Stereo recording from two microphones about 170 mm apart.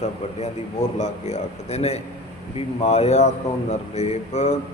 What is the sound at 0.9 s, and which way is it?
Speech, 40° left (ahead or behind).